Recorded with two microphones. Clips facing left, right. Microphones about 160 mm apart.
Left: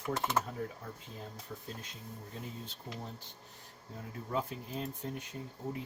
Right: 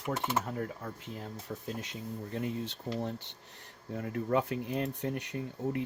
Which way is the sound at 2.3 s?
75° right (ahead or behind).